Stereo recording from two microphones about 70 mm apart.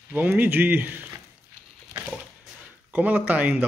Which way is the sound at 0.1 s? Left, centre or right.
Right.